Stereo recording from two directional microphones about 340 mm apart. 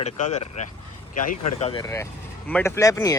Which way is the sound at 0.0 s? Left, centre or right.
Centre.